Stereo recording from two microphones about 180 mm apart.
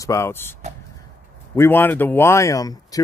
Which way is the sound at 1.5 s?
10° left (ahead or behind).